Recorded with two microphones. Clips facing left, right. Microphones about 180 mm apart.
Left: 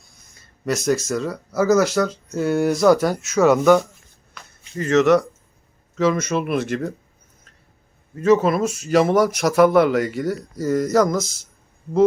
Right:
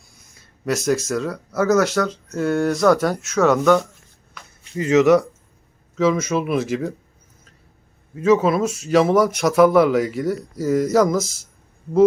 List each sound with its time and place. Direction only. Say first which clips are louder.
0.3 s speech: right 1 dB; centre (ahead or behind)
4.8 s speech: right 1 dB; 10° right (ahead or behind)
8.1 s speech: even; centre (ahead or behind)